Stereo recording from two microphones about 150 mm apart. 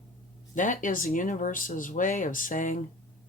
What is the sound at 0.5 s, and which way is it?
Speech, 60° left (ahead or behind).